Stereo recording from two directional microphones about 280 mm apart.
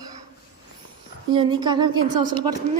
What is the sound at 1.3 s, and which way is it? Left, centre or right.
A woman's voice, centre.